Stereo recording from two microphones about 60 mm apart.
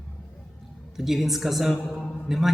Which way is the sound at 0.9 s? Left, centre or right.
Centre.